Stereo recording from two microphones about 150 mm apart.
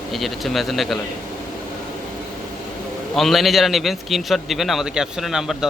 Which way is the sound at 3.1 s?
Centre (ahead or behind).